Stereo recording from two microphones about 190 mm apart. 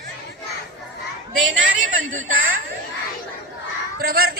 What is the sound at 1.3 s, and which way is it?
Speech, 80° right.